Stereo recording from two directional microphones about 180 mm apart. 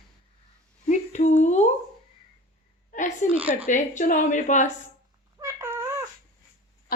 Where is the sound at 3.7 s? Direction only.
45° left (ahead or behind).